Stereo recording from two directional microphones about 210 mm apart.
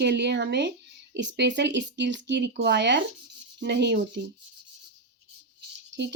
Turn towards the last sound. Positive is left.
turn(degrees=-55)  # may be behind; listen again after turning